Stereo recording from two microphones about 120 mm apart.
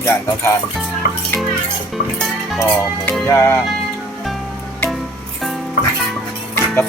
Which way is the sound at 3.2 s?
25° left (ahead or behind).